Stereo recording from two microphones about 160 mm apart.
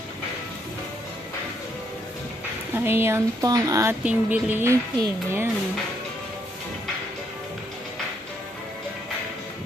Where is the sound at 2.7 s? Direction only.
15° right (ahead or behind).